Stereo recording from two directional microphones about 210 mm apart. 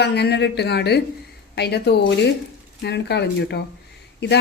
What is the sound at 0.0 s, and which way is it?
Speech, 50° left (ahead or behind).